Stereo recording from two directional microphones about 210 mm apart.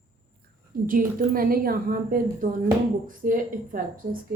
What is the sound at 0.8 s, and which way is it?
A woman's voice, 40° right (ahead or behind).